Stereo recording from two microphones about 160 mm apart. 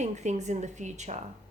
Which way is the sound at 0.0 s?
45° right (ahead or behind).